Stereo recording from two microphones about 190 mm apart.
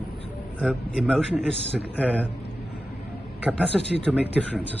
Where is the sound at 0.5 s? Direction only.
Centre (ahead or behind).